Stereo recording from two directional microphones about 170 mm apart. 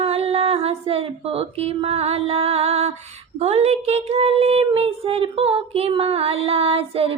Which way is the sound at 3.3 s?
40° right (ahead or behind).